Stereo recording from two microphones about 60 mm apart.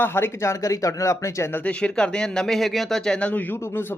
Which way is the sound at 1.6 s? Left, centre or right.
Centre.